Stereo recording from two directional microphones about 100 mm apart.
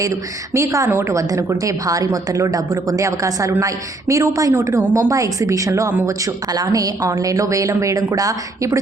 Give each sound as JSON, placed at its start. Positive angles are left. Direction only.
{"t": 0.0, "sound": "a woman's voice", "side_deg": -35}